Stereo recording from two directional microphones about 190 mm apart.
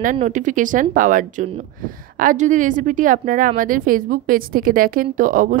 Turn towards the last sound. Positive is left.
turn(degrees=-45)  # may be behind; listen again after turning